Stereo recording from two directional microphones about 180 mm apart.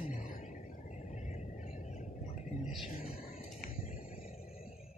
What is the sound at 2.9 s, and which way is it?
Speech, 50° left (ahead or behind).